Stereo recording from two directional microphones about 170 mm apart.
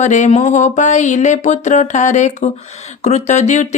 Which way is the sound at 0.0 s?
45° left (ahead or behind).